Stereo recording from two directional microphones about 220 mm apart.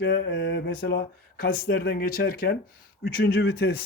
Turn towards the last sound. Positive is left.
turn(degrees=45)  # may be behind; listen again after turning